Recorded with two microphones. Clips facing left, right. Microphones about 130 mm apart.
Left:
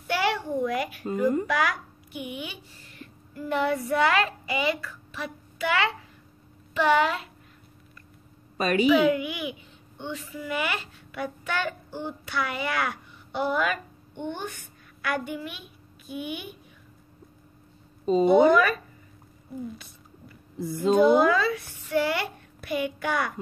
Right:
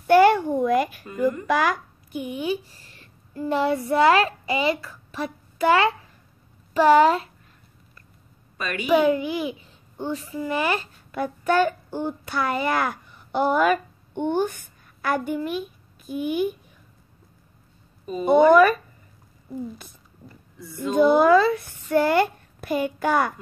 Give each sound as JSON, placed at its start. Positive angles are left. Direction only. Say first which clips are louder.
{"t": 0.0, "sound": "a sound", "louder": "right 11 dB", "side_deg": -50}
{"t": 1.5, "sound": "a woman's voice", "louder": "right 4 dB", "side_deg": -40}
{"t": 8.7, "sound": "a child's voice", "louder": "right 1 dB", "side_deg": -45}
{"t": 18.2, "sound": "a child's voice", "louder": "right 4 dB", "side_deg": -50}
{"t": 21.0, "sound": "a child's voice", "louder": "right 5 dB", "side_deg": -45}